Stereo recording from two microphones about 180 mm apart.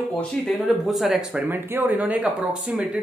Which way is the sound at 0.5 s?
Centre (ahead or behind).